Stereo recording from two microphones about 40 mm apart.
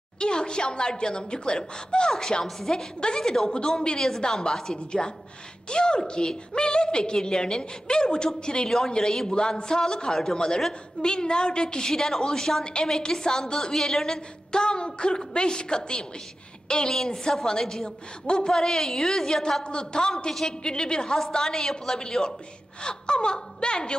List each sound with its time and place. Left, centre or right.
0.2 s a woman's voice: left
17.8 s a woman's voice: left